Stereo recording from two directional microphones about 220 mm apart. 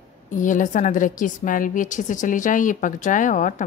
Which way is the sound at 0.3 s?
35° left (ahead or behind).